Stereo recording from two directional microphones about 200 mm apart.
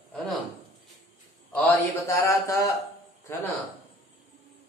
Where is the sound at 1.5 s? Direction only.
10° left (ahead or behind).